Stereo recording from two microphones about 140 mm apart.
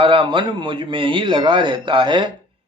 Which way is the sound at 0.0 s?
35° right (ahead or behind).